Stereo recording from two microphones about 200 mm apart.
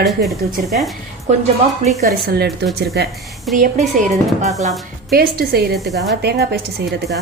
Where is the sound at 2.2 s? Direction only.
55° right (ahead or behind).